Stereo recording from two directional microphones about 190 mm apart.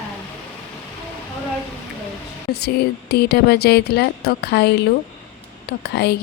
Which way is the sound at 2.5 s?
60° left (ahead or behind).